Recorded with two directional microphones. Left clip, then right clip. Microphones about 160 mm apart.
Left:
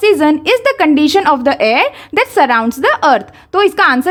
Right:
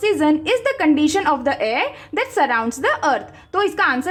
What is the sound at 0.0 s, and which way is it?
A woman's voice, 30° left (ahead or behind).